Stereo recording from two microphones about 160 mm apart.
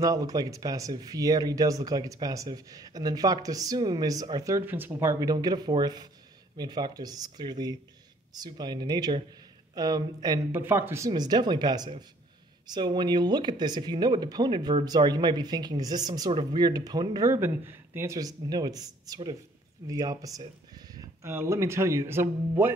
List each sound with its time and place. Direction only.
0.0 s speech: 20° right (ahead or behind)
10.5 s speech: 15° right (ahead or behind)